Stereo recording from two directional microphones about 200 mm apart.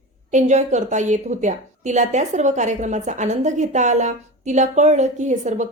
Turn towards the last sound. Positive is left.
turn(degrees=-35)  # may be behind; listen again after turning